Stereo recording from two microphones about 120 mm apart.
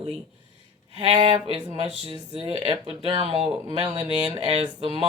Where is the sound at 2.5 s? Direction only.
40° right (ahead or behind).